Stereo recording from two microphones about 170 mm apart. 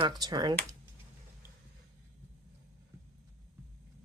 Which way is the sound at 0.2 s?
25° right (ahead or behind).